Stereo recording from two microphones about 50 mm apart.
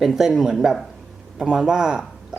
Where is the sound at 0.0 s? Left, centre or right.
Centre.